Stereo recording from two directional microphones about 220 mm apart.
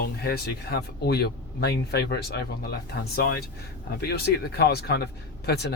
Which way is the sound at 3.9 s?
45° left (ahead or behind).